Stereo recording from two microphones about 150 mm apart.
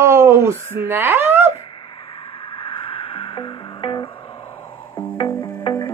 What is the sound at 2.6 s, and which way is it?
Music, 35° left (ahead or behind).